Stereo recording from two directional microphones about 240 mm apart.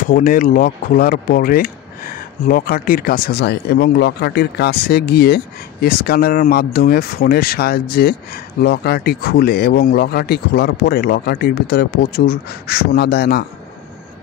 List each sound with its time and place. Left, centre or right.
0.0 s speech: left